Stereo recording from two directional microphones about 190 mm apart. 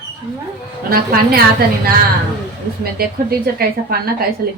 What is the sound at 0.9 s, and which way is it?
Speech, 55° right (ahead or behind).